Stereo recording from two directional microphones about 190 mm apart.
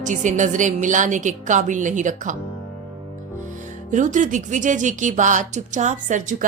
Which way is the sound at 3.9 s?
40° right (ahead or behind).